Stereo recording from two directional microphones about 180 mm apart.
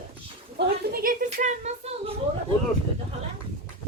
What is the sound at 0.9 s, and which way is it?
Speech, 50° right (ahead or behind).